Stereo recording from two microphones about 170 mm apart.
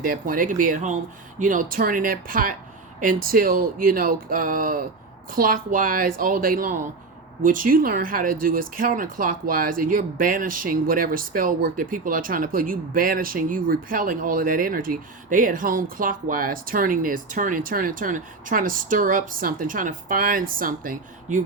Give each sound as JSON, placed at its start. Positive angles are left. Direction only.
{"t": 0.0, "sound": "speech", "side_deg": -55}